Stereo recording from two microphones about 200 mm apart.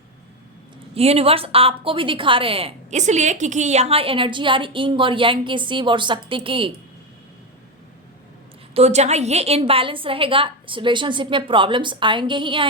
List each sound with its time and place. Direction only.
0.9 s a woman's voice: 30° right (ahead or behind)
8.7 s a woman's voice: 35° right (ahead or behind)